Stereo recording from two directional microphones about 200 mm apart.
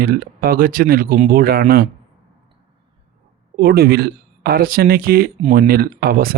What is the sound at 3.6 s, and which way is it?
Speech, 50° right (ahead or behind).